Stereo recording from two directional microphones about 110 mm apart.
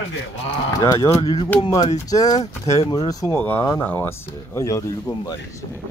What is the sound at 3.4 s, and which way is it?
Speech, 15° left (ahead or behind).